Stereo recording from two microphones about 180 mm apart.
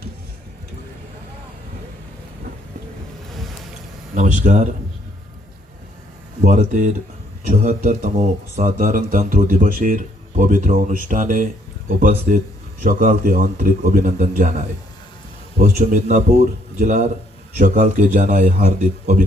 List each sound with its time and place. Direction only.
4.1 s speech: 45° right (ahead or behind)
6.4 s a man's voice: 45° right (ahead or behind)
15.6 s a man's voice: 45° right (ahead or behind)